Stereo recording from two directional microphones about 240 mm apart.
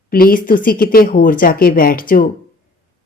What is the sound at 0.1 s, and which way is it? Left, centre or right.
Speech, left.